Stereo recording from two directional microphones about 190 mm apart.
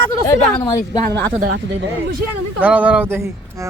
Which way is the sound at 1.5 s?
65° right (ahead or behind).